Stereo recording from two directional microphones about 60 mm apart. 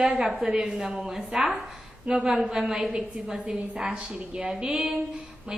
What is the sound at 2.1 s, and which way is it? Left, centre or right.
Speech, centre.